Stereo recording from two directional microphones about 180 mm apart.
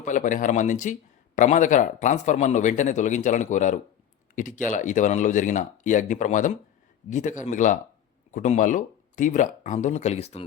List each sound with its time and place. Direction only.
0.0 s speech: 45° left (ahead or behind)